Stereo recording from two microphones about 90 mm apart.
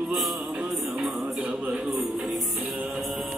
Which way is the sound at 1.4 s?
15° right (ahead or behind).